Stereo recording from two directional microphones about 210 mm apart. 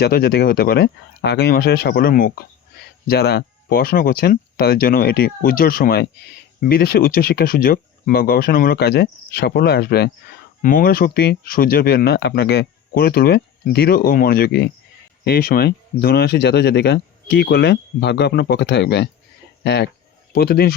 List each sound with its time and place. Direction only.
0.0 s speech: 50° left (ahead or behind)